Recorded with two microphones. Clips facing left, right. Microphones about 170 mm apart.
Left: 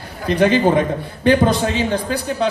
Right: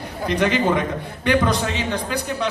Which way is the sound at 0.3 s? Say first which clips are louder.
Left 5 dB; 30° left (ahead or behind).